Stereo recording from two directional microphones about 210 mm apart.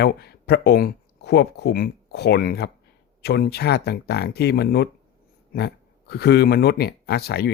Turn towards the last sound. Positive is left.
turn(degrees=50)  # may be behind; listen again after turning